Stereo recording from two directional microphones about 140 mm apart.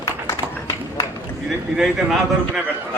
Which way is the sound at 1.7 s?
5° right (ahead or behind).